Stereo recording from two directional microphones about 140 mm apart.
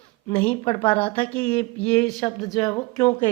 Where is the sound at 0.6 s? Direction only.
40° left (ahead or behind).